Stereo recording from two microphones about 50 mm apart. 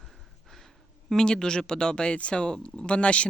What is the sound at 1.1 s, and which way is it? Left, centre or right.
A woman's voice, centre.